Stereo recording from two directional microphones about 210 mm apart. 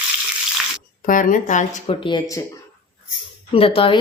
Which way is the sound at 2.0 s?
20° left (ahead or behind).